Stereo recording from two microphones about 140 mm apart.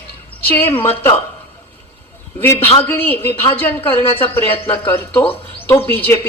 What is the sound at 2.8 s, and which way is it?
Speech, 15° left (ahead or behind).